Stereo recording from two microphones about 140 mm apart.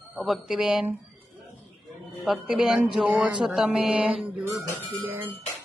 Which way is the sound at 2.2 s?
Centre (ahead or behind).